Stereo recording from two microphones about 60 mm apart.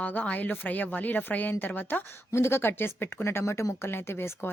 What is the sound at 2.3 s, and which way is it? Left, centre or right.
A woman's voice, left.